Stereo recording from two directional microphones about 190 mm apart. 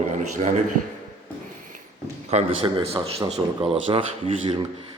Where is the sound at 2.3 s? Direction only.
30° right (ahead or behind).